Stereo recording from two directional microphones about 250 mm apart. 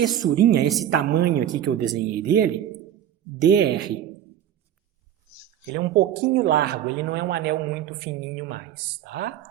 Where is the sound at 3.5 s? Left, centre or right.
Right.